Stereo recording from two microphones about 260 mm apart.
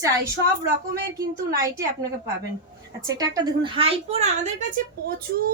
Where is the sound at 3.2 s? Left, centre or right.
Centre.